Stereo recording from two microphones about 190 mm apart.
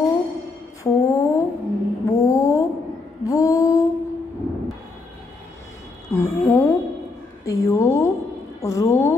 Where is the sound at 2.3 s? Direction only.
15° left (ahead or behind).